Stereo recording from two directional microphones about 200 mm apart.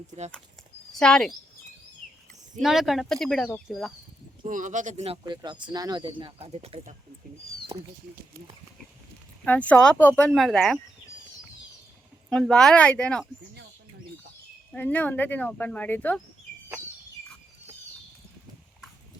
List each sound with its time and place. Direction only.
0.9 s speech: 5° left (ahead or behind)
2.6 s speech: centre (ahead or behind)
4.4 s speech: 40° right (ahead or behind)
9.4 s speech: 5° left (ahead or behind)
12.3 s speech: centre (ahead or behind)
14.7 s speech: 5° left (ahead or behind)